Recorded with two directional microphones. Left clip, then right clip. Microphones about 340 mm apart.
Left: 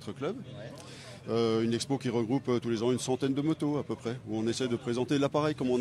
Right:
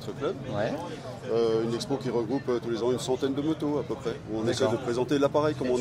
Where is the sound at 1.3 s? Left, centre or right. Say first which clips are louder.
Right 3 dB; left.